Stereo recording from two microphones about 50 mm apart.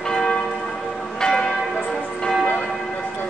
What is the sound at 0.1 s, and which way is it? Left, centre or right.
Church bell, centre.